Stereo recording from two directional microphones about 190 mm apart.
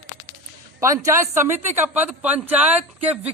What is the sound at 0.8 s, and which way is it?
A man's voice, 15° right (ahead or behind).